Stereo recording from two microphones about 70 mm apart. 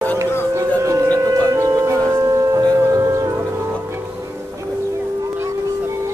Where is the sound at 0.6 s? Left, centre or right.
Right.